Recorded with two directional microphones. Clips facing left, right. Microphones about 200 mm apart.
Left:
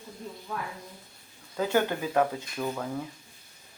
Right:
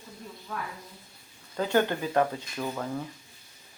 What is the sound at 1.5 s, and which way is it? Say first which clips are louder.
Speech: right 1 dB; 10° left (ahead or behind).